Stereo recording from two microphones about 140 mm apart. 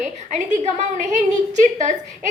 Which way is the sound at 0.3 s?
60° right (ahead or behind).